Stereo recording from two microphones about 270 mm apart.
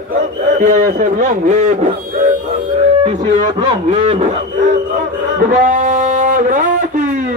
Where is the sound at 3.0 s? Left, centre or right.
Centre.